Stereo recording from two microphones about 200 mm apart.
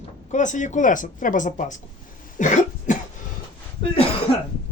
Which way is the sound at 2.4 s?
40° left (ahead or behind).